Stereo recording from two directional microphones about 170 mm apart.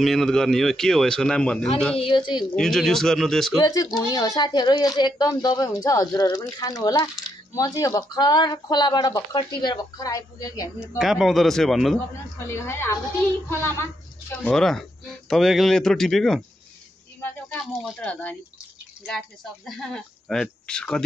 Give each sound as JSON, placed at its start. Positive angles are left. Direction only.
{"t": 0.0, "sound": "speech", "side_deg": 0}
{"t": 2.0, "sound": "speech", "side_deg": 30}
{"t": 2.5, "sound": "speech", "side_deg": 5}
{"t": 3.6, "sound": "speech", "side_deg": 20}
{"t": 11.0, "sound": "speech", "side_deg": 0}
{"t": 12.4, "sound": "speech", "side_deg": 15}
{"t": 14.4, "sound": "speech", "side_deg": 5}
{"t": 17.6, "sound": "speech", "side_deg": 10}